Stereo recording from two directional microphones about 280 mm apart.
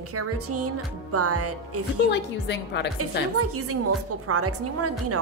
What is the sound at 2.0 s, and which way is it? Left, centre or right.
Speech, left.